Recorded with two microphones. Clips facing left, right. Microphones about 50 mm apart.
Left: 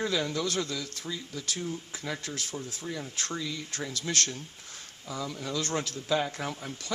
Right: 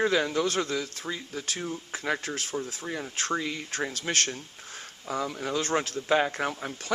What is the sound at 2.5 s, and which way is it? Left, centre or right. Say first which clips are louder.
Speech: right 4 dB; right.